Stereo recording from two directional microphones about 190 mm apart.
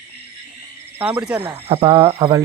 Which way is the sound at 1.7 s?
30° right (ahead or behind).